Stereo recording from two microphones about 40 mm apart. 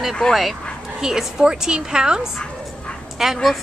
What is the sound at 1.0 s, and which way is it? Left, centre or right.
A woman's voice, centre.